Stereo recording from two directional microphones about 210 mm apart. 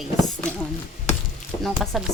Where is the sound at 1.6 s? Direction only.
Centre (ahead or behind).